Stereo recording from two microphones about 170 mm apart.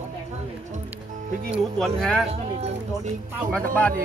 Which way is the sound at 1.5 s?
Centre (ahead or behind).